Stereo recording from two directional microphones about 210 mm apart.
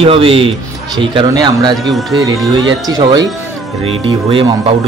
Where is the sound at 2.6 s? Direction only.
20° right (ahead or behind).